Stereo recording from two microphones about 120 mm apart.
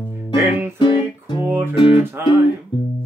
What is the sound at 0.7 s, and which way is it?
Music, 40° left (ahead or behind).